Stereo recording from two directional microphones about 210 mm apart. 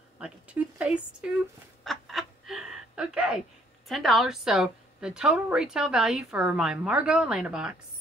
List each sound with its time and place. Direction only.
0.2 s speech: 5° right (ahead or behind)
1.9 s a sound: centre (ahead or behind)
3.9 s a woman's voice: centre (ahead or behind)